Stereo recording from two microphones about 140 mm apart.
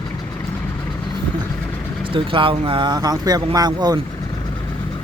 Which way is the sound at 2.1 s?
40° right (ahead or behind).